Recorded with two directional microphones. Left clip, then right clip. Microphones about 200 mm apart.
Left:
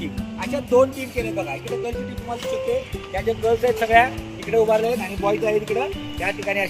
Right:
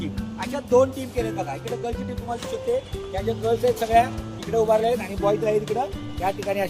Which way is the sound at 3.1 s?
45° left (ahead or behind).